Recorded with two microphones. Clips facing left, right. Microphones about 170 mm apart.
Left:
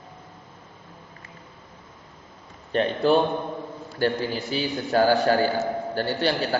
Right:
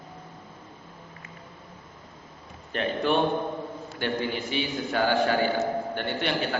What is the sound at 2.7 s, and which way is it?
A man's voice, 35° left (ahead or behind).